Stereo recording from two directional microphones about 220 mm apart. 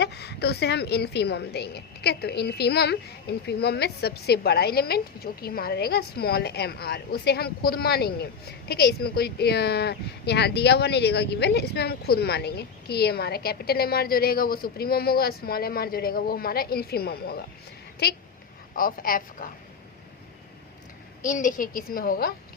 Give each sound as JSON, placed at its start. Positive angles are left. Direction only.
{"t": 0.0, "sound": "a woman's voice", "side_deg": 50}
{"t": 21.2, "sound": "a woman's voice", "side_deg": 35}